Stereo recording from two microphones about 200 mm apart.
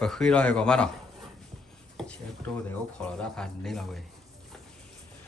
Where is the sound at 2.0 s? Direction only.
Centre (ahead or behind).